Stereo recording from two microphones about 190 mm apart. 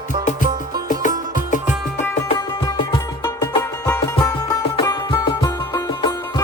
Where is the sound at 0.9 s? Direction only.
40° left (ahead or behind).